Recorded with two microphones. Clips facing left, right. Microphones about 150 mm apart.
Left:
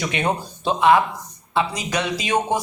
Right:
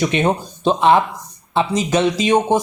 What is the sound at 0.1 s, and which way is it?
Speech, 25° right (ahead or behind).